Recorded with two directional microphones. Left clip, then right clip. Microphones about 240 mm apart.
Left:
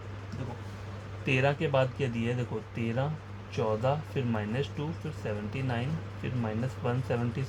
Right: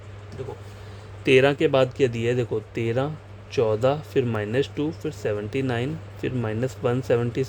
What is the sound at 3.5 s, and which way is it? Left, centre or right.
Speech, right.